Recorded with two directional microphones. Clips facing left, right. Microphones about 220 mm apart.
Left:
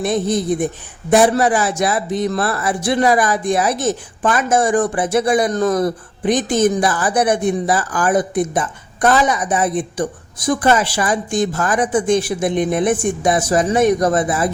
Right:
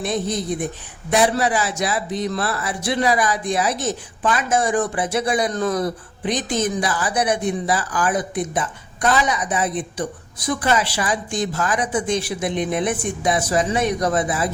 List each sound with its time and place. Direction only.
0.0 s speech: 50° left (ahead or behind)